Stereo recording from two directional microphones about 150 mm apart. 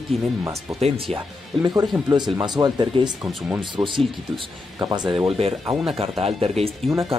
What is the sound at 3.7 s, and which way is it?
Speech, 35° right (ahead or behind).